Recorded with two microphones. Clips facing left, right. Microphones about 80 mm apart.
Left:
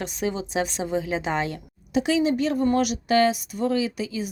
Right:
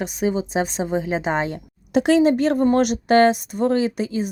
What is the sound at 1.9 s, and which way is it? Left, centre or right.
A woman's voice, right.